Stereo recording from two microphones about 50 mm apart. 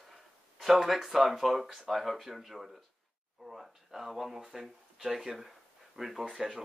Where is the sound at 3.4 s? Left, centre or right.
Centre.